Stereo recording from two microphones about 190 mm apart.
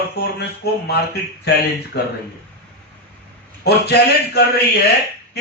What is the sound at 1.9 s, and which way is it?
Speech, 60° left (ahead or behind).